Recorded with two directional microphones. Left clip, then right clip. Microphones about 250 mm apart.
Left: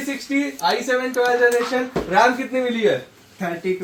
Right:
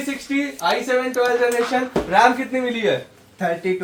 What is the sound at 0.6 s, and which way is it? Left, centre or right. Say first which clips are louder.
Speech: right 1 dB; centre.